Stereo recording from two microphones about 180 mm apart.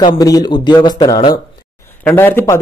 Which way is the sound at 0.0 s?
20° left (ahead or behind).